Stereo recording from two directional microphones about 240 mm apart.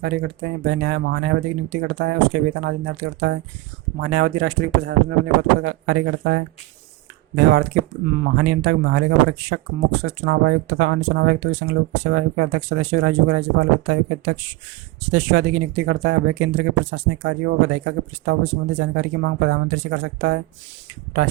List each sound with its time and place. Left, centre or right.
0.0 s speech: right